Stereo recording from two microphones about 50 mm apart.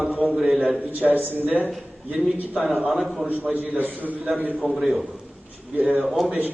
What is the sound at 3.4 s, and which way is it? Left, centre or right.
A man's voice, right.